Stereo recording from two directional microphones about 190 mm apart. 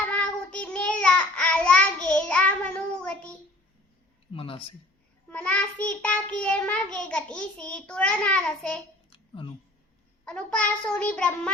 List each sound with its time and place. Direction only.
0.0 s child singing: 5° left (ahead or behind)
4.3 s speech: 30° left (ahead or behind)
5.3 s child singing: 5° left (ahead or behind)
9.0 s a sound: 25° left (ahead or behind)
10.2 s child singing: 5° left (ahead or behind)